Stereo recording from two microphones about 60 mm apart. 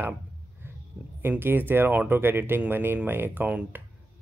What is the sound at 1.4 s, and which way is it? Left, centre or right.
Speech, right.